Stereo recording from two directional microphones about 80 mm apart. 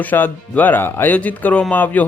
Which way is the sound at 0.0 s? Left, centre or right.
Left.